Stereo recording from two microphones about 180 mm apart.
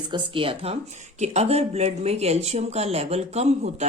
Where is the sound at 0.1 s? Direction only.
30° right (ahead or behind).